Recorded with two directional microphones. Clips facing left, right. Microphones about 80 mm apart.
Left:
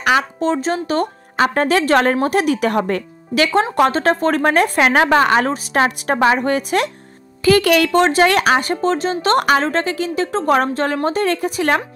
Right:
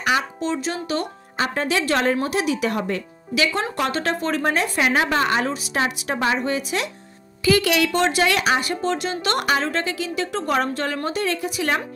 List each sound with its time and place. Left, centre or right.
0.0 s speech: left
0.4 s a woman's voice: left
1.3 s speech: left
5.5 s a woman's voice: left